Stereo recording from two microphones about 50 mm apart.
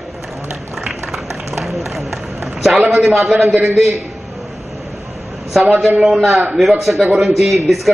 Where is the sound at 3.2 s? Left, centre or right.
Right.